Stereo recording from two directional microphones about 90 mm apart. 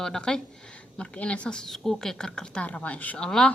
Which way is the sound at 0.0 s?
5° left (ahead or behind).